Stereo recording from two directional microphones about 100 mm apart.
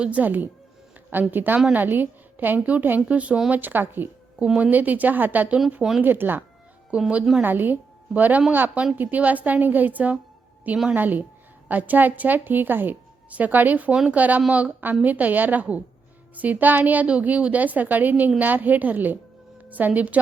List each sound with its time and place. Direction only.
0.0 s a woman's voice: 15° right (ahead or behind)